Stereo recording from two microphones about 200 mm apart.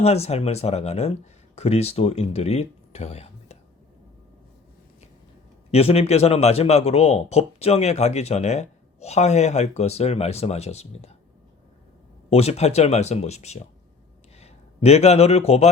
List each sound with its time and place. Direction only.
0.0 s speech: 30° left (ahead or behind)
5.7 s speech: 30° left (ahead or behind)
12.3 s speech: 30° left (ahead or behind)